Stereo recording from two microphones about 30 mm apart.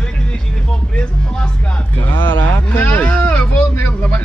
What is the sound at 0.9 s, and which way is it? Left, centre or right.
Speech, left.